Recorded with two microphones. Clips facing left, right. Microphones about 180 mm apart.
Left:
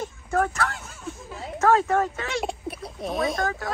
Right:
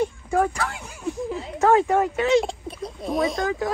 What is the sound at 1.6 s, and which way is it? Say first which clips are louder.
Speech: right 2 dB; 20° right (ahead or behind).